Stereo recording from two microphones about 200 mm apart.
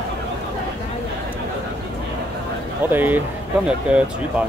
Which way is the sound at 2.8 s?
10° right (ahead or behind).